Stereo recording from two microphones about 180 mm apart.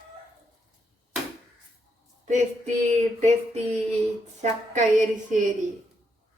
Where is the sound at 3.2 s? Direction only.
40° right (ahead or behind).